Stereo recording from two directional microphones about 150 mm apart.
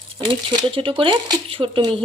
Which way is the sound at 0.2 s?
35° right (ahead or behind).